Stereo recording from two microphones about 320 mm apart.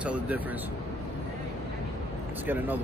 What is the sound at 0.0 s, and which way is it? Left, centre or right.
Speech, centre.